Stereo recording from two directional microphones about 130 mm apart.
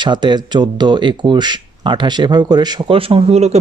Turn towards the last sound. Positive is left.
turn(degrees=-55)  # may be behind; listen again after turning